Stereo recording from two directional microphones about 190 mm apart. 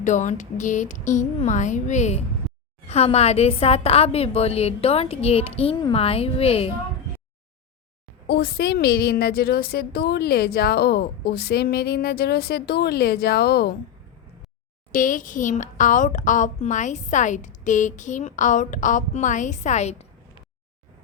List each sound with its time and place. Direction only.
0.0 s a woman's voice: 40° left (ahead or behind)
2.4 s a sound: centre (ahead or behind)
2.9 s a woman's voice: 35° left (ahead or behind)
8.3 s a woman's voice: 55° left (ahead or behind)
14.9 s a woman's voice: 45° left (ahead or behind)